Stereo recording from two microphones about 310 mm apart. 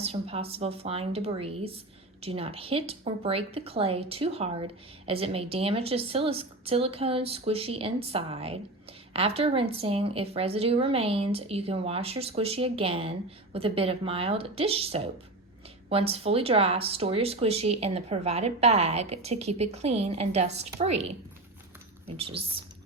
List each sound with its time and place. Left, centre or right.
0.0 s speech: centre
22.0 s speech: centre